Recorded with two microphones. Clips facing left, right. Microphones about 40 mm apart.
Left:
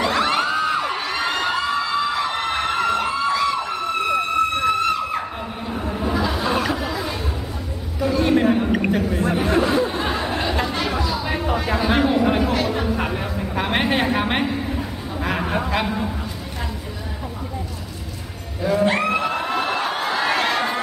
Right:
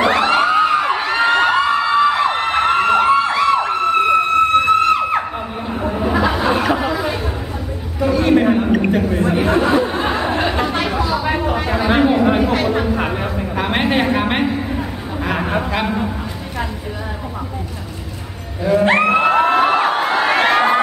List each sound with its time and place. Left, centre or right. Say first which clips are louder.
0.0 s music: right 5 dB; right
0.4 s a sound: right 6 dB; right
4.6 s music: right 6 dB; right
5.8 s chatter: right 6 dB; right
8.0 s chatter: right 4 dB; centre
8.7 s a sound: right 4 dB; centre
9.1 s chatter: right 4 dB; right
11.0 s a sound: right 5 dB; right
18.6 s music: right 4 dB; centre
18.9 s crowd: right 7 dB; right